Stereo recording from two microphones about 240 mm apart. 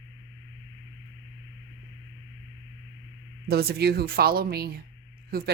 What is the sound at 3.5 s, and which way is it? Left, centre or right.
Speech, right.